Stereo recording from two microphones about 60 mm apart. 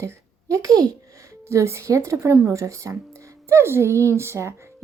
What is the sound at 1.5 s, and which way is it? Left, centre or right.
A woman's voice, right.